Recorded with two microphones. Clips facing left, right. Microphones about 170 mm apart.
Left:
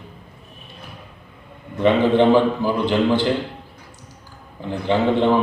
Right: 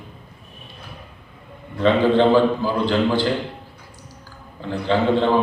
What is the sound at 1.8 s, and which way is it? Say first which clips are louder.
A man's voice: left 1 dB; 15° left (ahead or behind).